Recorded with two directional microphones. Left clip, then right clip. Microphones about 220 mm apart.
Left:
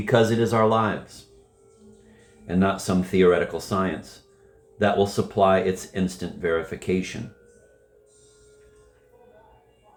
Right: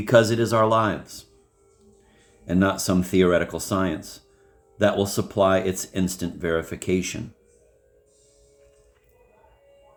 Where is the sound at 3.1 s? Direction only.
45° right (ahead or behind).